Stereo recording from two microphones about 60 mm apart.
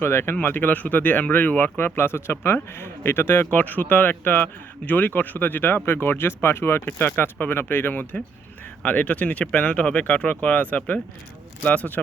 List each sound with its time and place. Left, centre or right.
0.0 s speech: left
0.3 s speech: left
2.0 s speech: left